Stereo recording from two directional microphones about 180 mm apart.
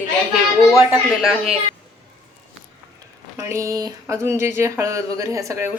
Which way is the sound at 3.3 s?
15° right (ahead or behind).